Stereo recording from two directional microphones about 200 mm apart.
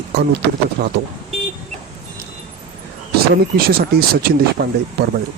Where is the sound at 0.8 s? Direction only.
60° right (ahead or behind).